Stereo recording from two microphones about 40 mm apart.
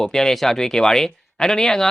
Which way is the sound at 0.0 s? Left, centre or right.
Centre.